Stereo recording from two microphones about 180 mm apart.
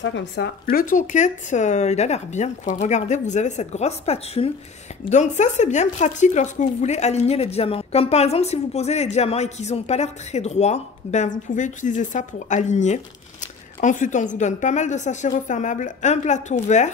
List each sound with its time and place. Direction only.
0.0 s speech: 85° left; by 16.9 s 40° left (ahead or behind)